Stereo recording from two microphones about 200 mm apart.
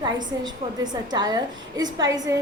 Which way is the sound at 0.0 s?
20° right (ahead or behind).